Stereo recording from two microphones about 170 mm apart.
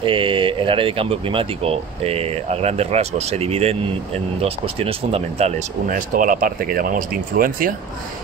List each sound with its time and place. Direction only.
0.0 s speech: 30° right (ahead or behind); by 7.7 s 55° right (ahead or behind)